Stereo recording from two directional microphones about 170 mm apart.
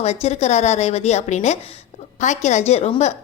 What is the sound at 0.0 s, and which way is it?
A woman's voice, 40° left (ahead or behind).